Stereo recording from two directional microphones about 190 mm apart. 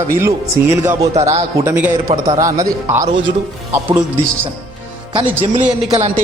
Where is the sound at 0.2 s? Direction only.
15° right (ahead or behind).